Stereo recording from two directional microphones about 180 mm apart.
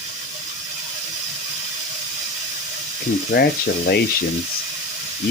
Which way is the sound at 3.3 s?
80° left.